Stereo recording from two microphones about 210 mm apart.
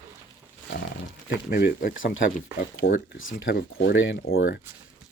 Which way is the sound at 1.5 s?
50° left (ahead or behind).